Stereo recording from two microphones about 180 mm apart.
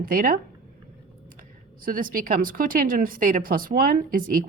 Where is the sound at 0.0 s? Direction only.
50° right (ahead or behind).